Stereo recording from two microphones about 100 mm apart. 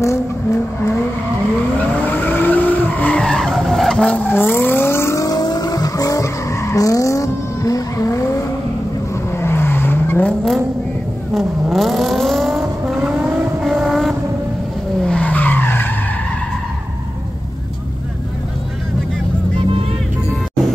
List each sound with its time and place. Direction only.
0.0 s vehicle: 30° left (ahead or behind)
2.0 s vehicle: 20° left (ahead or behind)
9.3 s vehicle: 25° left (ahead or behind)
11.6 s vehicle: centre (ahead or behind)
12.8 s vehicle: 10° right (ahead or behind)
15.0 s vehicle: 10° left (ahead or behind)